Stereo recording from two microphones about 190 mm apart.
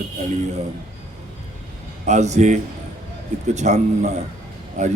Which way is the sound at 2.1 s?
35° right (ahead or behind).